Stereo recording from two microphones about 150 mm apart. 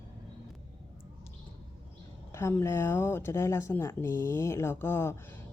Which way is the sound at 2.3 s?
20° left (ahead or behind).